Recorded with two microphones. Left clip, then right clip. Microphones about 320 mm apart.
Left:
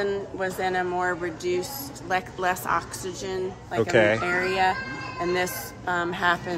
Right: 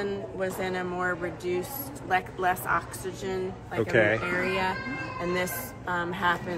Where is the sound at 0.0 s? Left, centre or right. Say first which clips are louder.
Left 4 dB; left.